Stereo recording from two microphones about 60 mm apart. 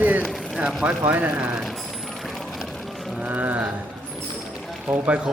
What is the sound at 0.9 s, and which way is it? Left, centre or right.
Speech, right.